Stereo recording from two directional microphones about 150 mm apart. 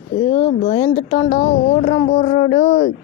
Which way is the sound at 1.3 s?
60° left (ahead or behind).